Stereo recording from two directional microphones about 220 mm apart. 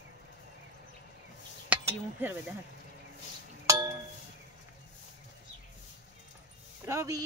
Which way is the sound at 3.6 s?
15° right (ahead or behind).